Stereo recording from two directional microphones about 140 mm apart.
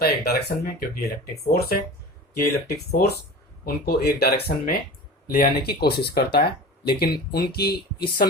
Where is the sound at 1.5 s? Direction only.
90° left.